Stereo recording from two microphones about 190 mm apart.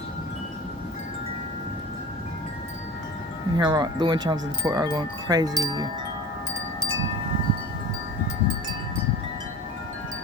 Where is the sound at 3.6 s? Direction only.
25° right (ahead or behind).